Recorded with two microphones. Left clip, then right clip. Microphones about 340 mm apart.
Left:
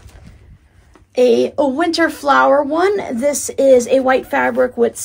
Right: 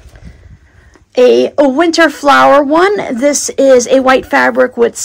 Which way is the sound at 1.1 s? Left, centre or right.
Right.